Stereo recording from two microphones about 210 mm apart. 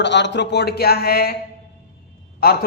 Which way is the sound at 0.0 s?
55° left (ahead or behind).